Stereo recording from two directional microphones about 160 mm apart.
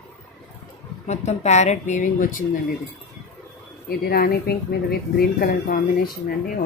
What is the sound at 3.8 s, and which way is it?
Speech, 70° left (ahead or behind).